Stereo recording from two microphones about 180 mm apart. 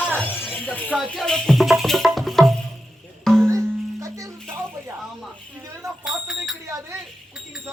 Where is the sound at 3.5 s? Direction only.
20° right (ahead or behind).